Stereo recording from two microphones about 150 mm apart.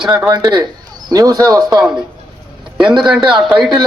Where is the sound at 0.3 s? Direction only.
25° right (ahead or behind).